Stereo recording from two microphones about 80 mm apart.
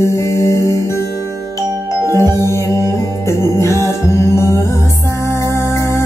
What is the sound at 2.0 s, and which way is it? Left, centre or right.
Music, left.